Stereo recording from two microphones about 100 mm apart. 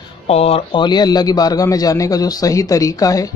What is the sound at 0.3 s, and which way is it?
Speech, 90° left.